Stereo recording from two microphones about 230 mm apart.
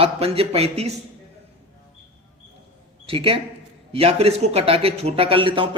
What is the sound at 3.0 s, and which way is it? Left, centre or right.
A man's voice, right.